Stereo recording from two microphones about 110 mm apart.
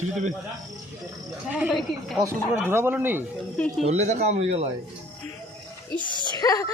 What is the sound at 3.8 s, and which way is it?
Speech, 85° right.